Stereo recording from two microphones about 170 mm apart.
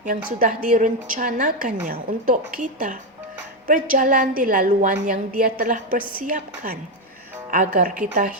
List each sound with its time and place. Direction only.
0.0 s a woman's voice: 50° right (ahead or behind)